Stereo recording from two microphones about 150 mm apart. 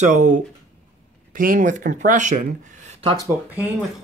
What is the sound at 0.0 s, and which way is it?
Speech, 55° right (ahead or behind).